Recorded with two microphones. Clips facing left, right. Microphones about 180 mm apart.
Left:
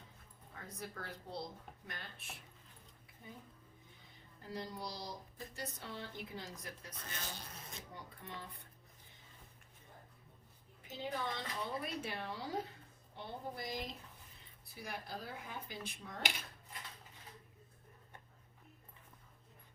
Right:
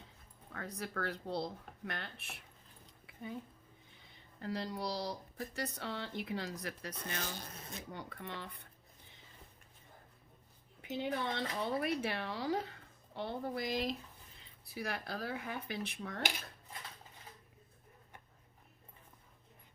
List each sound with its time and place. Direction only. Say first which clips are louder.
0.5 s speech: right 6 dB; 75° right (ahead or behind)
3.1 s a sound: right 10 dB; 80° right
4.4 s speech: right 5 dB; 75° right (ahead or behind)
10.8 s speech: right 5 dB; 70° right (ahead or behind)